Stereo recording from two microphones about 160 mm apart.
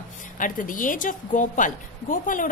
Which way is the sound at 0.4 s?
55° left (ahead or behind).